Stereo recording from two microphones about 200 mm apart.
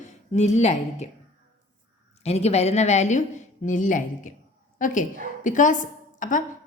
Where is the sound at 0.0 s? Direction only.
35° left (ahead or behind).